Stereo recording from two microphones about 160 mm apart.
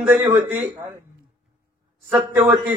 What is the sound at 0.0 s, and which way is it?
Speech, 10° right (ahead or behind).